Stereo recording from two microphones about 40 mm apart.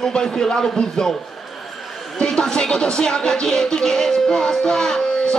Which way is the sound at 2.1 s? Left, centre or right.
Centre.